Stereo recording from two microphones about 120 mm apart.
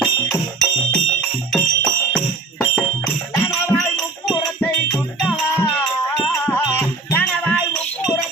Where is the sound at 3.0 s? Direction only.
20° left (ahead or behind).